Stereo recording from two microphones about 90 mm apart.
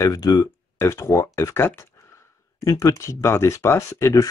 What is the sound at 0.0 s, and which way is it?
Speech, 45° left (ahead or behind).